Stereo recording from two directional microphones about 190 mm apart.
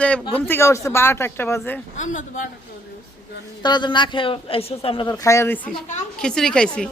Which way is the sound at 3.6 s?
25° left (ahead or behind).